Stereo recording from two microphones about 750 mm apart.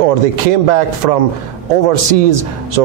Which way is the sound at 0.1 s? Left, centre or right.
Right.